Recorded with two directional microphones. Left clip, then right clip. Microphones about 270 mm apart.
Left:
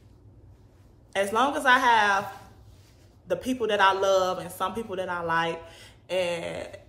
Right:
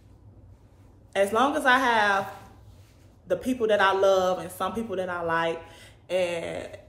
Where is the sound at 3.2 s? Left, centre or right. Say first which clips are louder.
Right 2 dB; centre.